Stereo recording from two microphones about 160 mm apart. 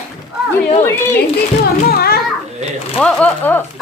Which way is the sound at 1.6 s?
75° left (ahead or behind).